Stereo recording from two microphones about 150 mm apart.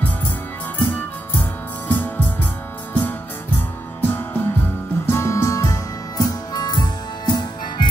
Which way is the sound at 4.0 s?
15° left (ahead or behind).